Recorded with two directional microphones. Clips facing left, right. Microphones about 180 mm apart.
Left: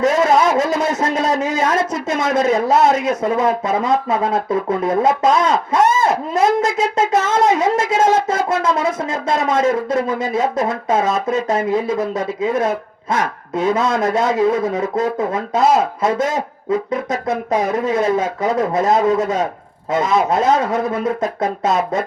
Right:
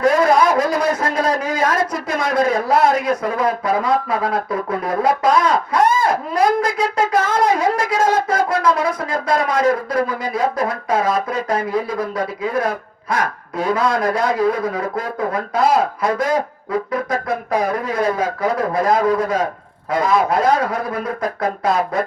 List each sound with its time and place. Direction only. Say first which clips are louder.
0.0 s a man's voice: even; 25° left (ahead or behind)
6.6 s wind instrument: left 1 dB; 25° left (ahead or behind)
10.1 s speech: left 2 dB; 25° left (ahead or behind)